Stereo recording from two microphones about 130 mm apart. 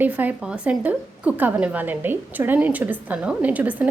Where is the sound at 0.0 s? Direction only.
15° right (ahead or behind).